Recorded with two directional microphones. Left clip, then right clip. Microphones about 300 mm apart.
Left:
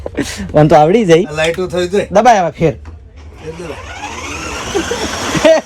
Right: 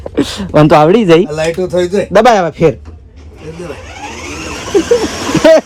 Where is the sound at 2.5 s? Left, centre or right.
Centre.